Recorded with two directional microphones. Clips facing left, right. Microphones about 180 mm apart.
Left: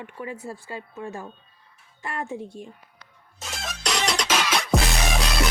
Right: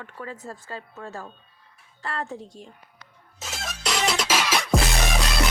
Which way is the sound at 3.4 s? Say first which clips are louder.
Even; centre (ahead or behind).